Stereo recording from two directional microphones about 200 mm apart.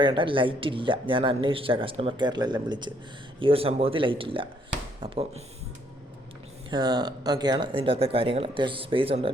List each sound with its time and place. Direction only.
0.0 s speech: 25° right (ahead or behind)
6.7 s speech: 20° right (ahead or behind)